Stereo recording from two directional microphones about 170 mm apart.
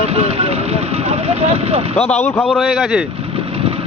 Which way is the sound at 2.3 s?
5° left (ahead or behind).